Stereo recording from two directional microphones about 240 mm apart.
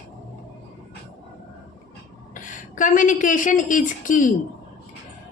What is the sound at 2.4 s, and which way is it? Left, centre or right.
A woman's voice, left.